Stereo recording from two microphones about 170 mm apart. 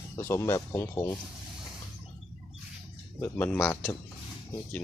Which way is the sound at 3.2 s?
10° left (ahead or behind).